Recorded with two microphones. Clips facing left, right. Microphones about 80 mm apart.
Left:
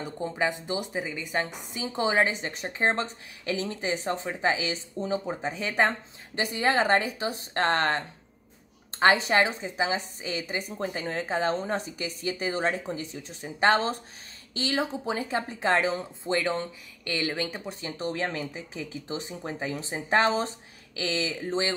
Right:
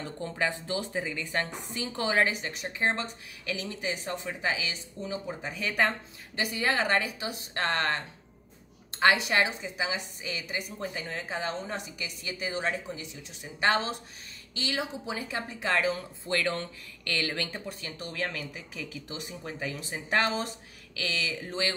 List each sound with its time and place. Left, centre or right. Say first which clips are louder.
0.0 s a woman's voice: left 3 dB; centre